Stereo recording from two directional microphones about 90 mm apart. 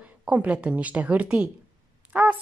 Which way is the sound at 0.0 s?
15° right (ahead or behind).